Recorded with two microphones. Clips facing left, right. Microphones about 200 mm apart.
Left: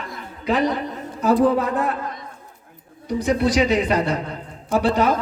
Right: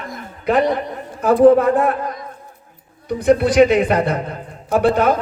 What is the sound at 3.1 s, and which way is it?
A man's voice, 55° right (ahead or behind).